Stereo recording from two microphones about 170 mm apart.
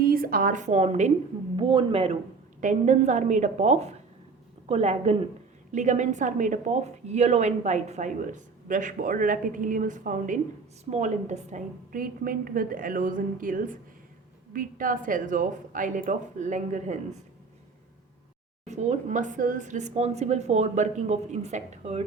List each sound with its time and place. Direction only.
0.0 s a woman's voice: 60° right (ahead or behind); by 1.1 s 40° right (ahead or behind)
1.5 s speech: 30° right (ahead or behind)
2.6 s a woman's voice: 45° right (ahead or behind)
18.6 s a woman's voice: 45° right (ahead or behind)